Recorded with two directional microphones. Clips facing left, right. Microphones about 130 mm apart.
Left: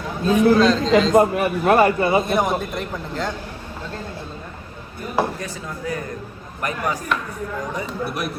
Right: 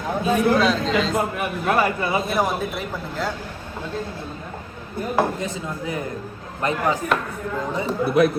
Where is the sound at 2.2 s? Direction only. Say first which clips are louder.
Left 2 dB; 5° right (ahead or behind).